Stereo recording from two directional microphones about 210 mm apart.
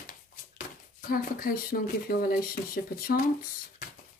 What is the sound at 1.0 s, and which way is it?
Speech, 45° left (ahead or behind).